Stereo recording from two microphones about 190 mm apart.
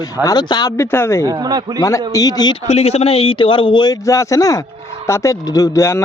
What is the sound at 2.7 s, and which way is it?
A man's voice, 35° left (ahead or behind).